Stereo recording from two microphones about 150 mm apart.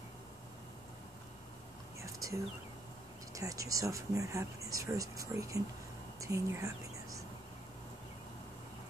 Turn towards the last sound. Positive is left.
turn(degrees=-20)  # may be behind; listen again after turning